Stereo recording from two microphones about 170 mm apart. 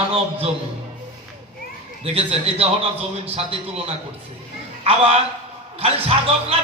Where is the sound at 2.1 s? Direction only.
35° right (ahead or behind).